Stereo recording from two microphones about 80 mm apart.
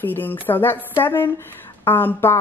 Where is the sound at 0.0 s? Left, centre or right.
Left.